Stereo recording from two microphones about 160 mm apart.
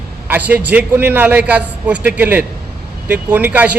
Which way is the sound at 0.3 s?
10° right (ahead or behind).